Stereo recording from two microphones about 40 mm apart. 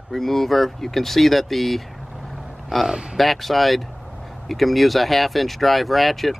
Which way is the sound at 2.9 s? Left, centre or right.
Right.